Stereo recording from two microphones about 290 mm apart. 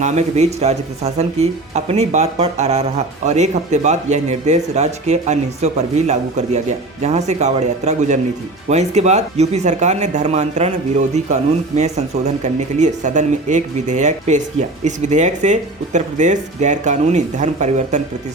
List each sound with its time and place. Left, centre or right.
0.0 s speech: right